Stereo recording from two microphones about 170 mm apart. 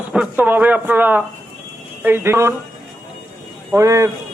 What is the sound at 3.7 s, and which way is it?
Speech, 15° right (ahead or behind).